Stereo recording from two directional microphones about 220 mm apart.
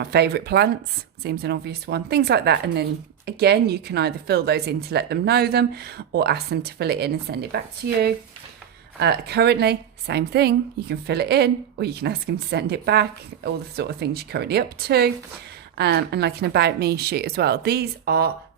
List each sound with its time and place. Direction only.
0.0 s a woman's voice: 45° right (ahead or behind)
9.0 s a woman's voice: 50° right (ahead or behind)